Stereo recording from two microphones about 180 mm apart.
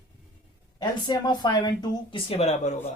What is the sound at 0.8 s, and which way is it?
Speech, 25° left (ahead or behind).